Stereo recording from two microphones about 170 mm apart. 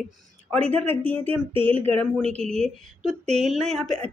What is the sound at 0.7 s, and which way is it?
Speech, 35° right (ahead or behind).